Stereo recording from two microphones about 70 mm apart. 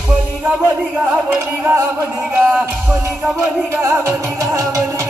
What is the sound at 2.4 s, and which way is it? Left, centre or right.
Music, centre.